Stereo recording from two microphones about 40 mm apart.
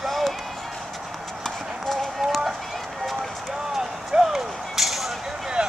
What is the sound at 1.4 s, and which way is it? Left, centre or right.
Run, centre.